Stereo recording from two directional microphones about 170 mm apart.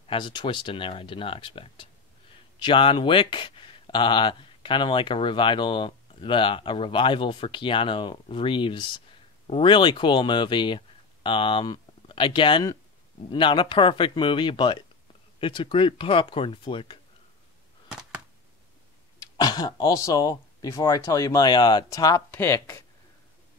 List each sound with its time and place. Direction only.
0.0 s speech: 30° left (ahead or behind)
19.3 s speech: 25° left (ahead or behind)